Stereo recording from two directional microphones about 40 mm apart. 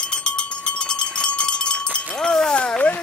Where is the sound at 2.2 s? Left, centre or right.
Centre.